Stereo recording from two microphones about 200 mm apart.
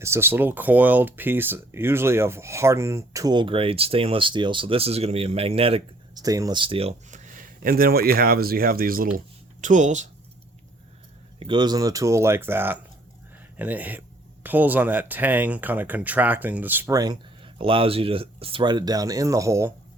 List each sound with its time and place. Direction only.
0.0 s speech: 10° right (ahead or behind); by 10.1 s 35° right (ahead or behind)
11.3 s speech: 25° right (ahead or behind)